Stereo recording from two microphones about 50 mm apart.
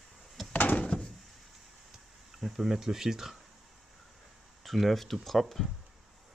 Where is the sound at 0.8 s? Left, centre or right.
Centre.